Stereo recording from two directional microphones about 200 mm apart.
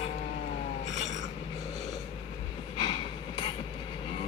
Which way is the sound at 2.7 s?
25° left (ahead or behind).